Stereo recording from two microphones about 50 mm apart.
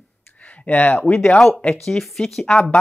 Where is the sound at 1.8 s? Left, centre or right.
Centre.